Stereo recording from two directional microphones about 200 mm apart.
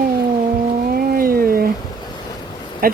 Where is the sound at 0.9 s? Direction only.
45° right (ahead or behind).